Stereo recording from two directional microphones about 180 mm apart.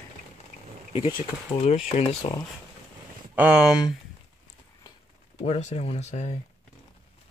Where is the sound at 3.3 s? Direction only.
5° right (ahead or behind).